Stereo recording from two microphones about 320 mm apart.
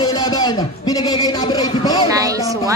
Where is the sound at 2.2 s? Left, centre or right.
Centre.